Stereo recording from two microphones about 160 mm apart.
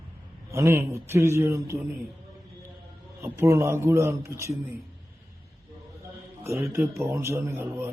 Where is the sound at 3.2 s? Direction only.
15° right (ahead or behind).